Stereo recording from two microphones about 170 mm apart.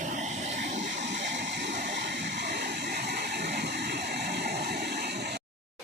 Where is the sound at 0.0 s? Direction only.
45° right (ahead or behind).